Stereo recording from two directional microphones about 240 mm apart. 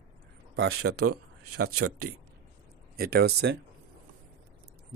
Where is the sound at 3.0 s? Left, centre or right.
Right.